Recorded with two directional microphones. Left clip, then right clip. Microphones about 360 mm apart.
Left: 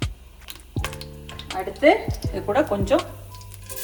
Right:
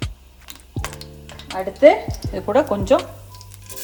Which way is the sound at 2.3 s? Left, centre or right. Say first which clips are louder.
Right 3 dB; right.